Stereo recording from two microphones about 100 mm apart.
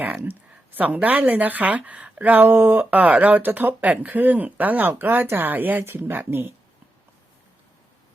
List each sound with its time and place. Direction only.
0.2 s speech: 20° right (ahead or behind)